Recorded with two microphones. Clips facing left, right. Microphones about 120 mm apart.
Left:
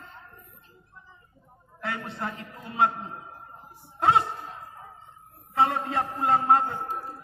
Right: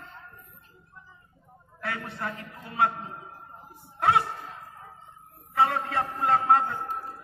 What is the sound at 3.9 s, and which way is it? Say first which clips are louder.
Speech: left 1 dB; 25° left (ahead or behind).